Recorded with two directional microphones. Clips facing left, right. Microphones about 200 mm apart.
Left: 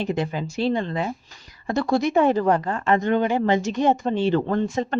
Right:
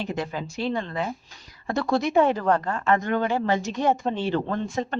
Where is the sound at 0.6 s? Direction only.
20° left (ahead or behind).